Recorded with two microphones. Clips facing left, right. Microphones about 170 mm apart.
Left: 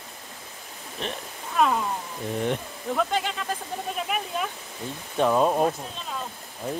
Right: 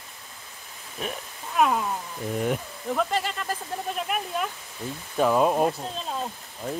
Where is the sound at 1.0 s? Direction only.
5° right (ahead or behind).